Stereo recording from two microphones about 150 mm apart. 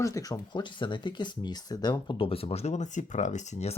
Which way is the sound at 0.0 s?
20° left (ahead or behind).